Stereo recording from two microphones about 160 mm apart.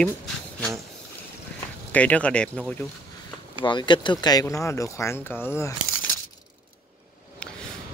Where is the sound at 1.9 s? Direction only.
10° left (ahead or behind).